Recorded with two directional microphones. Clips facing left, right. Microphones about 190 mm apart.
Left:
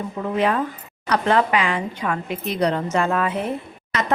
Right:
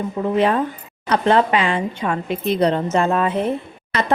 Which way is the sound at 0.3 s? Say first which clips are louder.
Right 2 dB; 30° right (ahead or behind).